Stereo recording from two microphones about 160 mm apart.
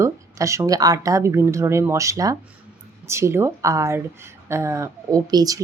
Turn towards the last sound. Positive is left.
turn(degrees=-25)  # may be behind; listen again after turning